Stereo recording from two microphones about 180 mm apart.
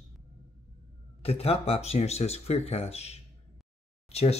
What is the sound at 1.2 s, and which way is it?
Speech, 35° left (ahead or behind).